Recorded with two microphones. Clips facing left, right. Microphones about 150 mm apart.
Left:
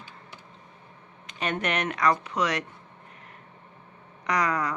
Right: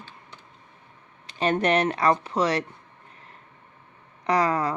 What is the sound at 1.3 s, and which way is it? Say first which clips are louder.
Speech: right 7 dB; 30° right (ahead or behind).